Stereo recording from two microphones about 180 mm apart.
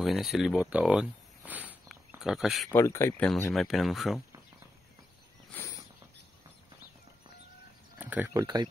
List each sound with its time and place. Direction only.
0.0 s speech: centre (ahead or behind)
2.7 s speech: 15° left (ahead or behind)
3.3 s speech: 5° left (ahead or behind)
8.0 s speech: 10° right (ahead or behind)
8.4 s speech: 25° right (ahead or behind)